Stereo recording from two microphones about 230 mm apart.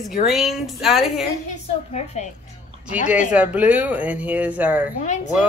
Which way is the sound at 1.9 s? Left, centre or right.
Left.